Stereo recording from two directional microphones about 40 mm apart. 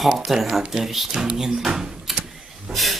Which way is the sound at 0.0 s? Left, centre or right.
Centre.